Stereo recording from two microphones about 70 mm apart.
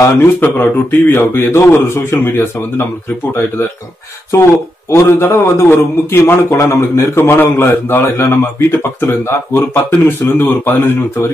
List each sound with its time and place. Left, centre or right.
0.0 s a man's voice: left
5.2 s a man's voice: left